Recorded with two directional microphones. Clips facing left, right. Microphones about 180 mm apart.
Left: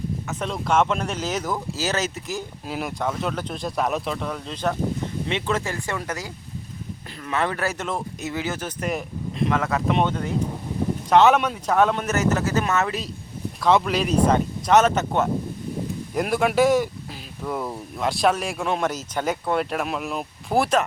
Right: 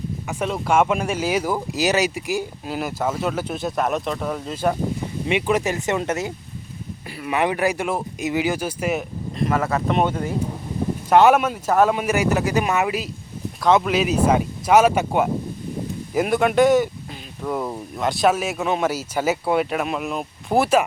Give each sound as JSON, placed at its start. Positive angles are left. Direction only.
{"t": 0.3, "sound": "speech", "side_deg": -5}
{"t": 2.6, "sound": "speech", "side_deg": 0}
{"t": 13.6, "sound": "speech", "side_deg": 0}